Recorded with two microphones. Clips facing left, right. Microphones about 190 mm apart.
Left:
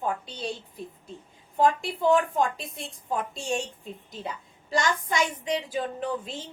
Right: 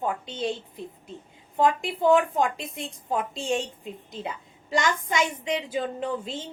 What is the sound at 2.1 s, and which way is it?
A woman's voice, 20° right (ahead or behind).